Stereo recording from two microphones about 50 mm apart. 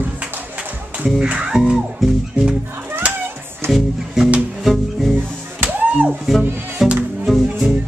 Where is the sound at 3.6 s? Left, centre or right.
Right.